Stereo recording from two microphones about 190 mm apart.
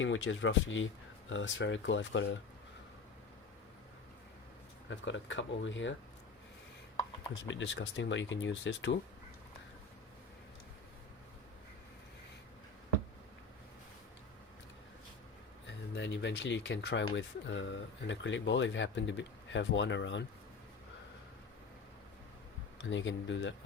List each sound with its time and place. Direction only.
0.0 s speech: 90° left
4.9 s speech: 75° left (ahead or behind)
7.4 s speech: 70° left (ahead or behind)
15.6 s speech: 65° left (ahead or behind)
22.8 s speech: 75° left (ahead or behind)